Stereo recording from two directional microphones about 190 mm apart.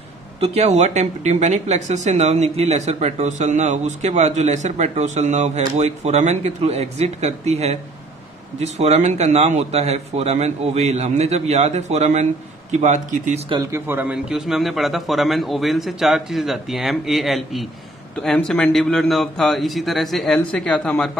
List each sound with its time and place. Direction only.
0.4 s speech: 35° right (ahead or behind)
13.5 s a man's voice: 20° right (ahead or behind); by 21.1 s 5° left (ahead or behind)